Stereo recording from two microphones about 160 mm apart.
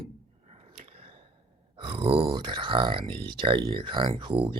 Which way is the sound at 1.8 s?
35° right (ahead or behind).